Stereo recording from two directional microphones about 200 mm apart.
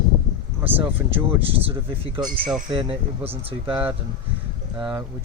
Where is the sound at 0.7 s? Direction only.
10° right (ahead or behind).